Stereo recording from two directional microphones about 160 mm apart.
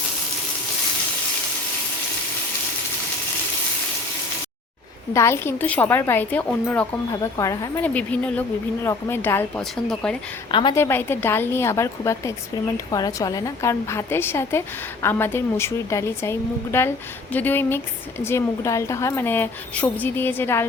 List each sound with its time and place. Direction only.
5.1 s a woman's voice: 15° left (ahead or behind)
7.1 s a woman's voice: 20° left (ahead or behind)
7.8 s a woman's voice: 10° left (ahead or behind)
10.5 s a woman's voice: 30° left (ahead or behind)
10.8 s a woman's voice: 15° left (ahead or behind)